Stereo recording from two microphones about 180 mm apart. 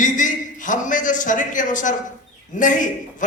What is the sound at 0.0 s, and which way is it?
A man's voice, 45° left (ahead or behind).